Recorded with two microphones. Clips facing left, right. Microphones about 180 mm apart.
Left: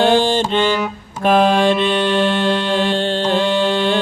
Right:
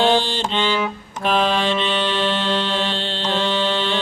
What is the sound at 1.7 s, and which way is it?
Music, 10° left (ahead or behind).